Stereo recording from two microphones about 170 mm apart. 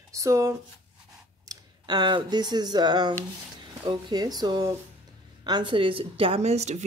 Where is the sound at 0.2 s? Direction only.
15° right (ahead or behind).